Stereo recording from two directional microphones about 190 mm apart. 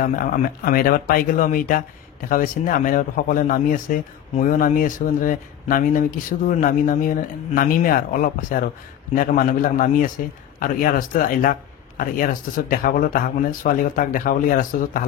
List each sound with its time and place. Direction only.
0.0 s a man's voice: 45° left (ahead or behind)